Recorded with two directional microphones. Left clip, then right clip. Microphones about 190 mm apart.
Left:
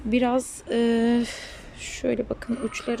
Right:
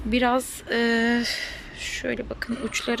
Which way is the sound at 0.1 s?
15° left (ahead or behind).